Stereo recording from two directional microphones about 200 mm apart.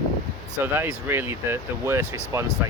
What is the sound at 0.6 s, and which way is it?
Speech, 10° right (ahead or behind).